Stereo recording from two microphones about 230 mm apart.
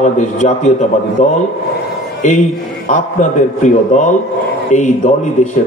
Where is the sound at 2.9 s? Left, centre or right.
Left.